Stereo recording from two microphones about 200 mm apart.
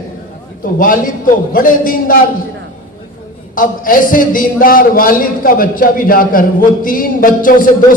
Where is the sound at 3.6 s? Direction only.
45° left (ahead or behind).